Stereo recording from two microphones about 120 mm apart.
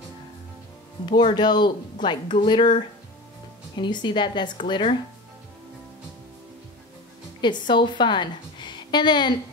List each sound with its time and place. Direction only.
1.1 s speech: 40° left (ahead or behind)
3.7 s speech: 40° left (ahead or behind)
7.4 s a woman's voice: 40° left (ahead or behind)